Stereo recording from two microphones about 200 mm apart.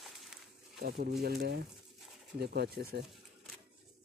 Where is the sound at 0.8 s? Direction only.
50° right (ahead or behind).